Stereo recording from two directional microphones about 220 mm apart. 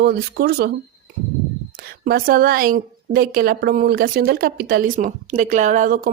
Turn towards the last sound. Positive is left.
turn(degrees=-40)  # may be behind; listen again after turning